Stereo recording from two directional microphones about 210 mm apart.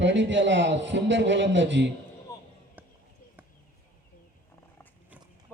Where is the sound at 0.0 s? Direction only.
60° right (ahead or behind).